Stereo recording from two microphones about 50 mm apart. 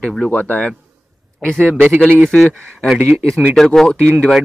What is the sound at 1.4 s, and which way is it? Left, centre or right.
Speech, centre.